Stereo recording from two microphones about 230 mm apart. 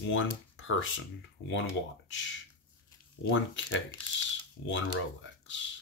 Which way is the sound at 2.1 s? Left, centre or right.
Left.